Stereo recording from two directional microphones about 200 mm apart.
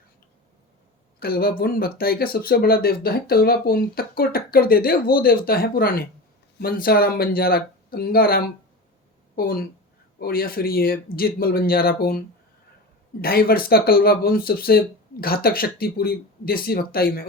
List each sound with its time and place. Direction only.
1.2 s speech: 50° left (ahead or behind)
13.2 s speech: 50° left (ahead or behind)